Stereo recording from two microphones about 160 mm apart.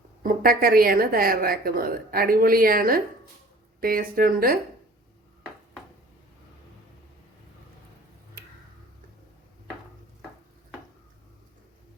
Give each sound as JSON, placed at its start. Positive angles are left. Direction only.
{"t": 0.2, "sound": "a woman's voice", "side_deg": -65}